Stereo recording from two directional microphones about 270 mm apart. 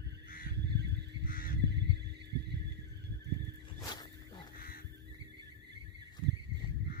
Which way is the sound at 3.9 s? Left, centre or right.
Centre.